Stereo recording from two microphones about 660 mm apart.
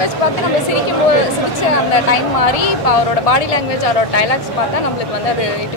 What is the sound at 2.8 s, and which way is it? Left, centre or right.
Speech, left.